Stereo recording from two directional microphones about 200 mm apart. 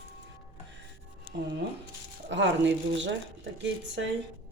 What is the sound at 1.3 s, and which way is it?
Speech, 60° right (ahead or behind).